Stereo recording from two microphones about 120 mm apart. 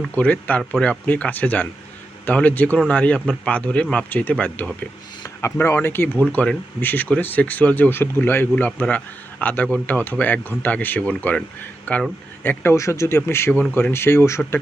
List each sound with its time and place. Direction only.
0.1 s speech: 15° left (ahead or behind)